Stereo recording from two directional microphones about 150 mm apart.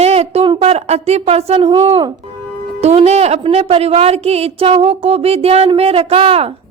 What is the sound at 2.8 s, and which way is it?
A woman's voice, 45° right (ahead or behind).